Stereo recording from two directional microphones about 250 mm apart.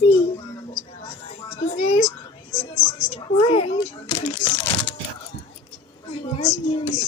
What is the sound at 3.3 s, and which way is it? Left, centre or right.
Speech, left.